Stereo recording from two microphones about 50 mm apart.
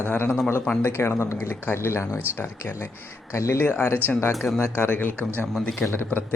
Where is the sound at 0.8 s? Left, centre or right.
Left.